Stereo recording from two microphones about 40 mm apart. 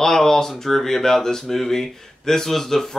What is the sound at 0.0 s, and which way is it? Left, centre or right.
Speech, centre.